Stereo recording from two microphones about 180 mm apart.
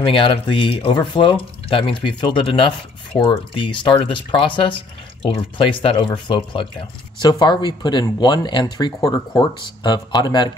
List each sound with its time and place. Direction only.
0.0 s speech: 30° left (ahead or behind)